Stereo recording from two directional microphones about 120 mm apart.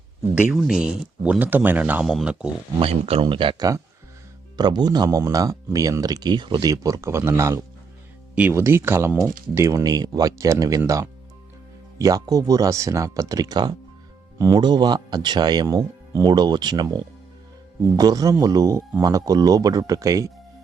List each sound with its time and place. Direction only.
0.5 s speech: 5° right (ahead or behind)
2.7 s speech: 55° right (ahead or behind); by 20.3 s 25° right (ahead or behind)